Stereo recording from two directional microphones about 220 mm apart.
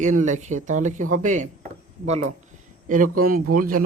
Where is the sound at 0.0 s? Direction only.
35° right (ahead or behind).